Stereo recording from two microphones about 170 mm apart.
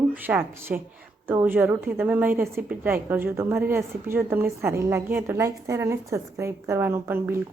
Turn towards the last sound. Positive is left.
turn(degrees=-15)  # may be behind; listen again after turning